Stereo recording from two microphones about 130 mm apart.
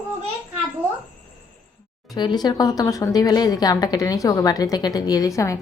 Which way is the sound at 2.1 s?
35° left (ahead or behind).